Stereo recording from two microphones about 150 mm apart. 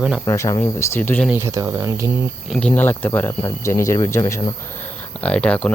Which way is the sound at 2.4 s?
5° left (ahead or behind).